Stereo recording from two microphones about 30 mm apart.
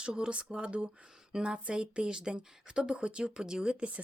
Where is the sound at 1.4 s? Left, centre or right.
Right.